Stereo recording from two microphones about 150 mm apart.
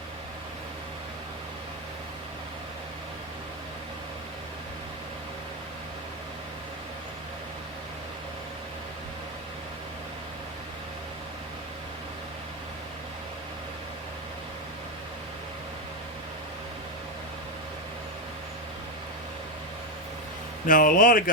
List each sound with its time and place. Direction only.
20.7 s speech: 65° left (ahead or behind)